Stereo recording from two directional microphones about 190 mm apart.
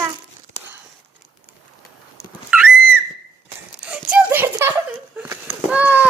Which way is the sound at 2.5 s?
10° right (ahead or behind).